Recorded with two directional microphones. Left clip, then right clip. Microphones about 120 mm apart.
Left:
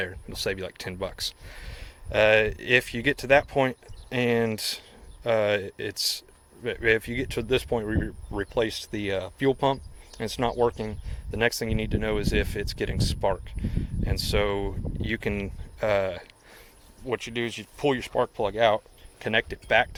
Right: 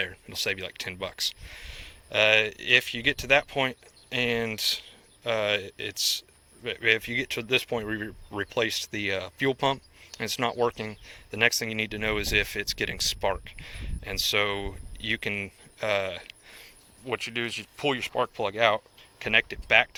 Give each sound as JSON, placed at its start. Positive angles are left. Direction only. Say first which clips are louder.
{"t": 0.0, "sound": "speech", "louder": "even", "side_deg": 35}
{"t": 6.6, "sound": "speech", "louder": "left 1 dB", "side_deg": 40}
{"t": 15.0, "sound": "speech", "louder": "right 1 dB", "side_deg": 45}
{"t": 17.1, "sound": "speech", "louder": "left 1 dB", "side_deg": 30}